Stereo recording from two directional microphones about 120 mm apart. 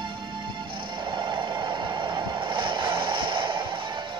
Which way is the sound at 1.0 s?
40° right (ahead or behind).